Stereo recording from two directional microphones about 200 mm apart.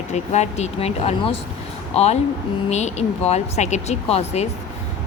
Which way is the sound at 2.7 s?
35° left (ahead or behind).